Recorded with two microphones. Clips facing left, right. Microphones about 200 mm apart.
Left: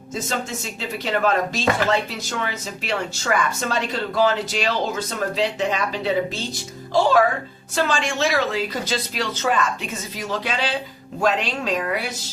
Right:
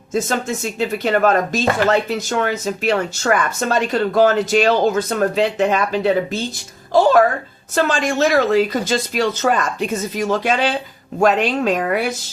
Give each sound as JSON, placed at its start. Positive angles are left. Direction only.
{"t": 0.1, "sound": "speech", "side_deg": -50}
{"t": 7.8, "sound": "speech", "side_deg": -45}